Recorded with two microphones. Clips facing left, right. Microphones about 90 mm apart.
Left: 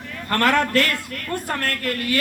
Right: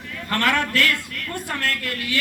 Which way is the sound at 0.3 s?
40° left (ahead or behind).